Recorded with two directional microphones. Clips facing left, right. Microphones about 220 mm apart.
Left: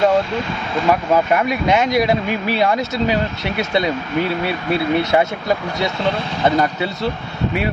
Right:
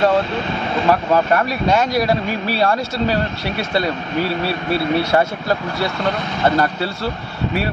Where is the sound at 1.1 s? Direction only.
15° left (ahead or behind).